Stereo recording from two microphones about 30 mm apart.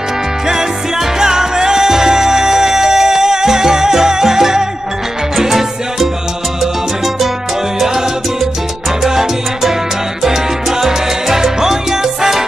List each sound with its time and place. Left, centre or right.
0.5 s music: centre
7.8 s salsa music: centre